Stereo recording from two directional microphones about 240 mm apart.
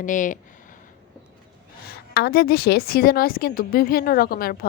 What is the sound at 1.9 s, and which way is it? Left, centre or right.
A woman's voice, left.